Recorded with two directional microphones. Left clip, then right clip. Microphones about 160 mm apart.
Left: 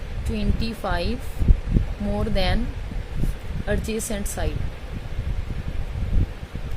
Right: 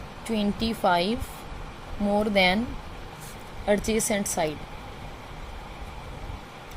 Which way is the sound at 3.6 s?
20° right (ahead or behind).